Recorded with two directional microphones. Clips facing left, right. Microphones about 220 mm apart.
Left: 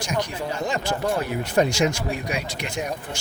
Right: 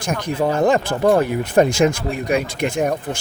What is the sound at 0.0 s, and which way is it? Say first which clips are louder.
Speech: right 6 dB; 55° right (ahead or behind).